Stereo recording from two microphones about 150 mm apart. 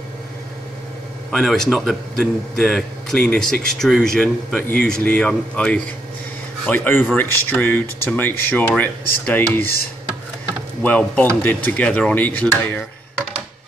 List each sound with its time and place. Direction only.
1.3 s speech: centre (ahead or behind)
10.8 s speech: 10° left (ahead or behind)